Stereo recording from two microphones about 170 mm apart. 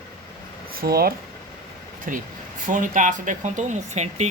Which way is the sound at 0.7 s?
65° right (ahead or behind).